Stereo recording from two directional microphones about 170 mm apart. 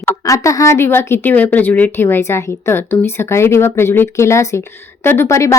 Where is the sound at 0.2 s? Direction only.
20° left (ahead or behind).